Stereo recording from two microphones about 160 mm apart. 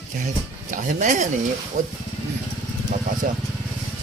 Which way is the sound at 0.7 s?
55° right (ahead or behind).